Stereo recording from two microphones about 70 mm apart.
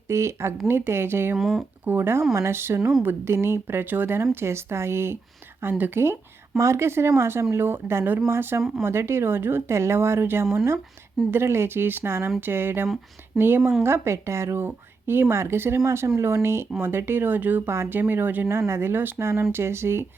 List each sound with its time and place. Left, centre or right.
0.1 s speech: right
1.4 s speech: centre
1.8 s speech: right
6.6 s speech: right
13.3 s speech: centre
13.8 s speech: right
18.4 s speech: right